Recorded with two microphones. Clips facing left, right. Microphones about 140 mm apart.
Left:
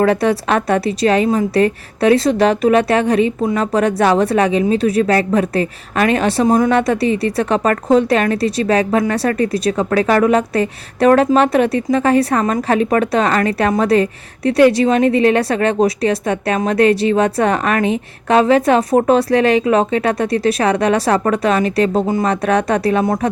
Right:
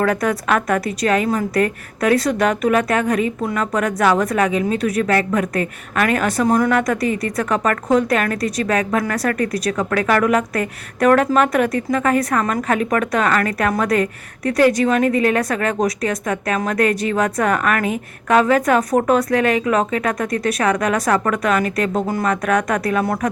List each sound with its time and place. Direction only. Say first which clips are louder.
0.0 s a woman's voice: left 4 dB; 30° left (ahead or behind)